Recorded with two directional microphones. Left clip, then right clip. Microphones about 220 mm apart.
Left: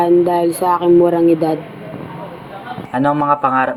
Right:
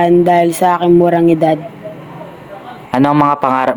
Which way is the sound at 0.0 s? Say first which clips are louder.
Right 3 dB; 45° right (ahead or behind).